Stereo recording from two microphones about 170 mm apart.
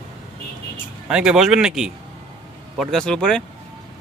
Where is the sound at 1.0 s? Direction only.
5° right (ahead or behind).